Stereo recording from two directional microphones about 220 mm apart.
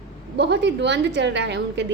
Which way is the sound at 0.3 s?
50° right (ahead or behind).